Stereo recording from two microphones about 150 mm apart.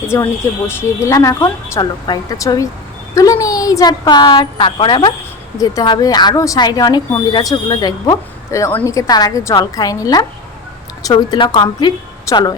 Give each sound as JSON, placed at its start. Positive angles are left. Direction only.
{"t": 0.1, "sound": "a woman's voice", "side_deg": 20}